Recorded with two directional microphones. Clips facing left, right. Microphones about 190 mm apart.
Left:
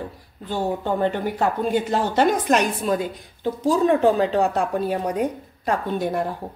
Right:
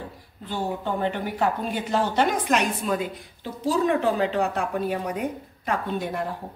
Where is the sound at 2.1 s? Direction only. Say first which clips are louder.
Left 6 dB; 40° left (ahead or behind).